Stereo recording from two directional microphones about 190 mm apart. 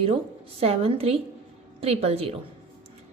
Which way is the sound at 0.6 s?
30° right (ahead or behind).